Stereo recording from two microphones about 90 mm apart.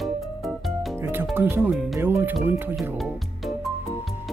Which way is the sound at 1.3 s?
25° right (ahead or behind).